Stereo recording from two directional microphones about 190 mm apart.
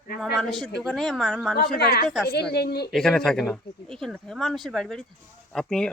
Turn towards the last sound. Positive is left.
turn(degrees=5)  # may be behind; listen again after turning